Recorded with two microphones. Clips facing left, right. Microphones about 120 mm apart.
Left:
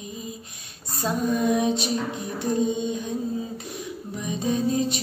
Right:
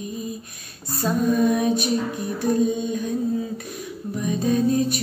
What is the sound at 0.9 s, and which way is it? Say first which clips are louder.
Female singing: right 4 dB; 20° left (ahead or behind).